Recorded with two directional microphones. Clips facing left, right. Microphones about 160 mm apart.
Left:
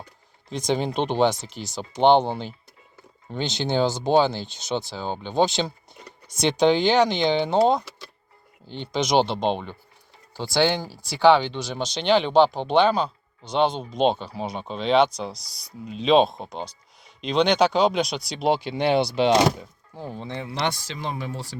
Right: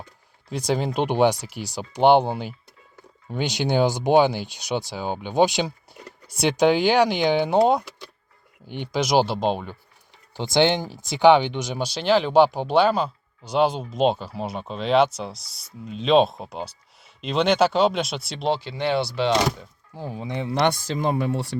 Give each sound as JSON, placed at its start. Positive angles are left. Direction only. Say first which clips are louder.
{"t": 0.5, "sound": "speech", "louder": "even", "side_deg": -5}
{"t": 7.7, "sound": "a sound", "louder": "right 1 dB", "side_deg": -10}
{"t": 8.6, "sound": "speech", "louder": "right 1 dB", "side_deg": -15}
{"t": 10.3, "sound": "speech", "louder": "right 2 dB", "side_deg": -20}
{"t": 18.4, "sound": "speech", "louder": "left 2 dB", "side_deg": 15}
{"t": 20.0, "sound": "speech", "louder": "right 3 dB", "side_deg": -5}
{"t": 20.5, "sound": "speech", "louder": "right 7 dB", "side_deg": -55}